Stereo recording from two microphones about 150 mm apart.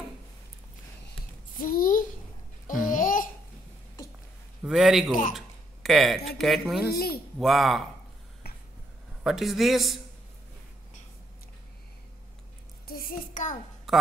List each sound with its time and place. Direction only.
1.6 s a sound: 70° left (ahead or behind)
2.9 s babbling: 60° left (ahead or behind)
4.6 s a man's voice: 5° right (ahead or behind)
6.9 s speech: 90° left
7.3 s a man's voice: centre (ahead or behind)
8.4 s finger snapping: 90° left
9.2 s a man's voice: centre (ahead or behind)
12.8 s a child's voice: 80° left; by 13.6 s 60° left (ahead or behind)
13.9 s a sound: centre (ahead or behind)